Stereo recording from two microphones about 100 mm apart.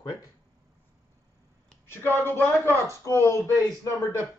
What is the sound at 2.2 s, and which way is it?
A man's voice, 20° left (ahead or behind).